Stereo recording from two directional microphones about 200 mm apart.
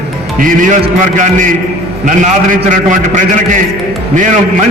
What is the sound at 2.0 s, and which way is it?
A man's voice, 40° right (ahead or behind).